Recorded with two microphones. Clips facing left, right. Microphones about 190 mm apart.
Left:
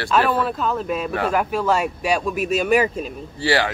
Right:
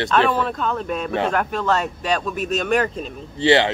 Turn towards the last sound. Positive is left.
turn(degrees=-20)  # may be behind; listen again after turning